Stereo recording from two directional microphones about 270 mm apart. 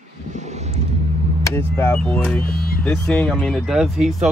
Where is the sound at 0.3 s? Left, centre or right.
Right.